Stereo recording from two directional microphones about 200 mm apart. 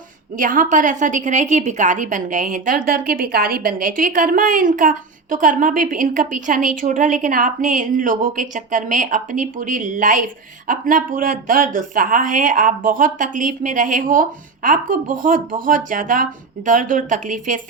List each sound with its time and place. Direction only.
0.3 s a woman's voice: 40° right (ahead or behind)